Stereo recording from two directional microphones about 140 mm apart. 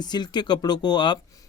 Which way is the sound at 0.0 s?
30° left (ahead or behind).